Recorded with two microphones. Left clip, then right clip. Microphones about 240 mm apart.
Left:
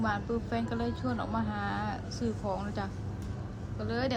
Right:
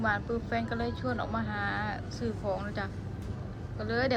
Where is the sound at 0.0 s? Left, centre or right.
Centre.